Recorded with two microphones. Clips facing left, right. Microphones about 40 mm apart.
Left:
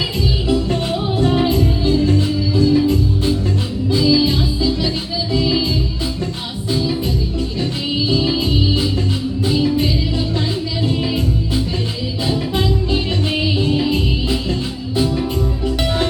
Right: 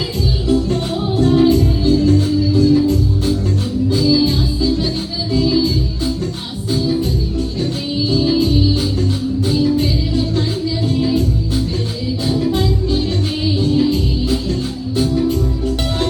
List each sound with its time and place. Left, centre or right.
0.4 s music: left
8.4 s music: left